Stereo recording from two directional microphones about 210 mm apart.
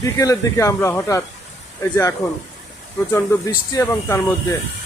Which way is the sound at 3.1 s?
15° left (ahead or behind).